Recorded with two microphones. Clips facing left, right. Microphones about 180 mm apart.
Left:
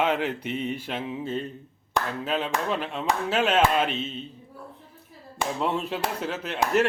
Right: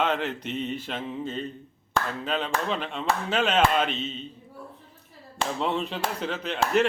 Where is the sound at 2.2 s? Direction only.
5° left (ahead or behind).